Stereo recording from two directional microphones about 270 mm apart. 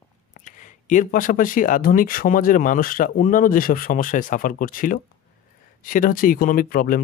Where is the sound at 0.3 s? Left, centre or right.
Left.